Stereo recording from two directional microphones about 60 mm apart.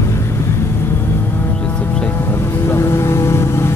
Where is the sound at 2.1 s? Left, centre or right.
Left.